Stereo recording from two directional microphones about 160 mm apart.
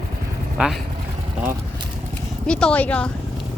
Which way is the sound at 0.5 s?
5° right (ahead or behind).